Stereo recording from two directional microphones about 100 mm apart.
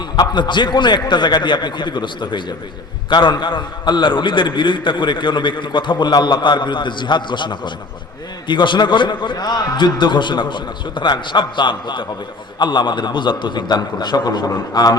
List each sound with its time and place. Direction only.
0.2 s a man's voice: 50° left (ahead or behind)